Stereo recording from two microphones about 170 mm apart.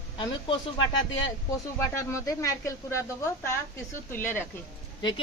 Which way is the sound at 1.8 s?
15° left (ahead or behind).